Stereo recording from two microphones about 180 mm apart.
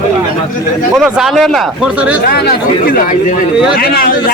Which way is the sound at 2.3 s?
60° left (ahead or behind).